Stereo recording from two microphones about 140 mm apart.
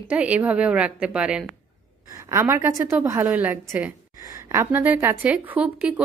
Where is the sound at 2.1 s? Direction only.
25° right (ahead or behind).